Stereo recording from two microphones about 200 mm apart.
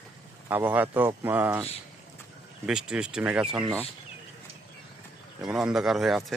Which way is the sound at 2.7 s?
5° right (ahead or behind).